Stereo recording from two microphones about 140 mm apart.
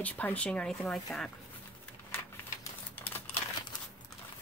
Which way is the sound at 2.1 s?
15° left (ahead or behind).